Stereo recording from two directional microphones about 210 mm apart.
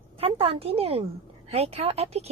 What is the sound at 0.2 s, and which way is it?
A woman's voice, 25° right (ahead or behind).